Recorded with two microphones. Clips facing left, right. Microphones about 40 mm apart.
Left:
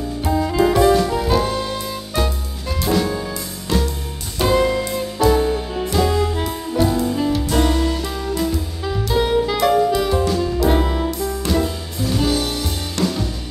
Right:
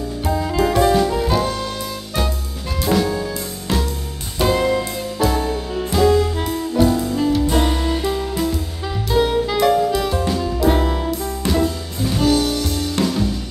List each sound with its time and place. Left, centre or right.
0.2 s music: centre
4.4 s music: centre
7.6 s music: centre
8.4 s music: centre